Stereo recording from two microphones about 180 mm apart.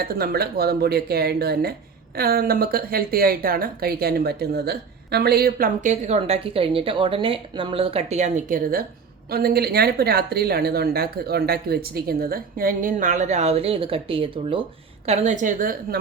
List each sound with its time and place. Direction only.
0.0 s a woman's voice: 60° right (ahead or behind)